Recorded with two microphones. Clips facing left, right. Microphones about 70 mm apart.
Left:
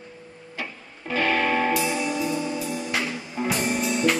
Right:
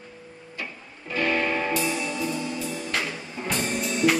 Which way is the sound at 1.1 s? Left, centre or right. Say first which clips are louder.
Left 2 dB; left.